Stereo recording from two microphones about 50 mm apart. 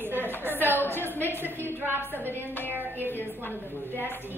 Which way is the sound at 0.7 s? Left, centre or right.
Left.